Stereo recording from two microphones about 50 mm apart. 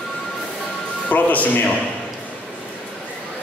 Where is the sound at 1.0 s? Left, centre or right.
Left.